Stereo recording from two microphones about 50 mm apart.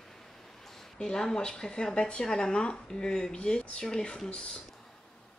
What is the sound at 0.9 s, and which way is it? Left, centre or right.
Speech, centre.